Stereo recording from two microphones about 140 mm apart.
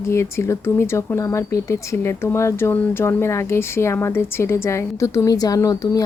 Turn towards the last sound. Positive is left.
turn(degrees=25)  # may be behind; listen again after turning